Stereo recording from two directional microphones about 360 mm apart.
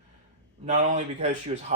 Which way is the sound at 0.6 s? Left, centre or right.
Centre.